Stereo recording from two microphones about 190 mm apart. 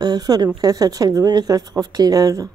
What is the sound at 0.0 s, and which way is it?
A woman's voice, 20° right (ahead or behind).